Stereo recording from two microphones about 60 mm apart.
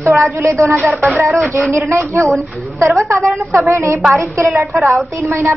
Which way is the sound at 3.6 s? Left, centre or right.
Right.